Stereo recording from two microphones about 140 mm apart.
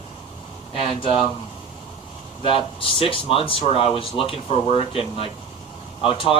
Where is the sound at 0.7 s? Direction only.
40° left (ahead or behind).